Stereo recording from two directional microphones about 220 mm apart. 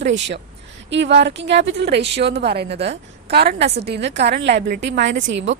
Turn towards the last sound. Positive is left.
turn(degrees=-55)  # may be behind; listen again after turning